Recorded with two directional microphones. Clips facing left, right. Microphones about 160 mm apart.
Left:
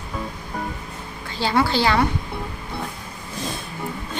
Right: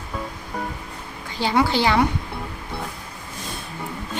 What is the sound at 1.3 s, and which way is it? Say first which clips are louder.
Speech: even; 15° right (ahead or behind).